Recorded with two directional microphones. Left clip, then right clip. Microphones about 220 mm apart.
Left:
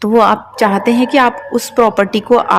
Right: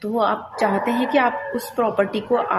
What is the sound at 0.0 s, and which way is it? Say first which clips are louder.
A woman's voice: left 11 dB; 45° left (ahead or behind).